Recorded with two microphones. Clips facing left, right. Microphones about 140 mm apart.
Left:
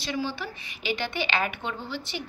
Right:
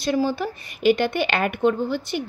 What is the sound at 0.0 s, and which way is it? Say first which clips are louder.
A woman's voice: right 9 dB; 45° right (ahead or behind).